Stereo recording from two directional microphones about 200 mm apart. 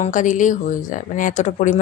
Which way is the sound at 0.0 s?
40° left (ahead or behind).